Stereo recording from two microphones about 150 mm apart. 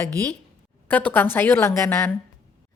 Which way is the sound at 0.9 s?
10° left (ahead or behind).